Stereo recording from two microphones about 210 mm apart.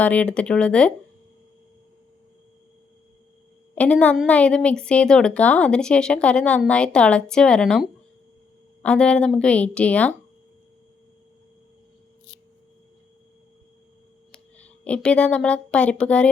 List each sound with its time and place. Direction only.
0.0 s a woman's voice: 5° left (ahead or behind)
3.8 s a woman's voice: 5° left (ahead or behind)
14.8 s a woman's voice: 5° left (ahead or behind)